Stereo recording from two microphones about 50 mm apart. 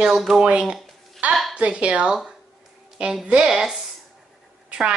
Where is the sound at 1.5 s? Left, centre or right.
Right.